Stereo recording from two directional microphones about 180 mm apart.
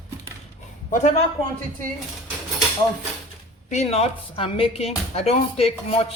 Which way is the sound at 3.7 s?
40° left (ahead or behind).